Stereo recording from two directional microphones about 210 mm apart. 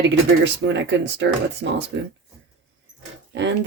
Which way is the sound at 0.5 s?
55° right (ahead or behind).